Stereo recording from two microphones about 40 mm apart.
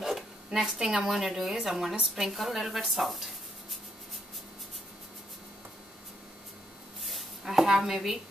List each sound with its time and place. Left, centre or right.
0.0 s zipper: centre
0.7 s a woman's voice: centre
7.0 s a sound: centre